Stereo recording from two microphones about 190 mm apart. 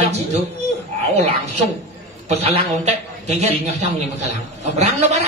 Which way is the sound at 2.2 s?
35° right (ahead or behind).